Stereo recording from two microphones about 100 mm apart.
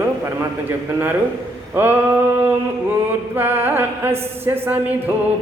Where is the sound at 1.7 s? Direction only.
20° right (ahead or behind).